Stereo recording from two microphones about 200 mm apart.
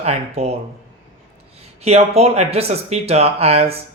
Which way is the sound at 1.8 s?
30° right (ahead or behind).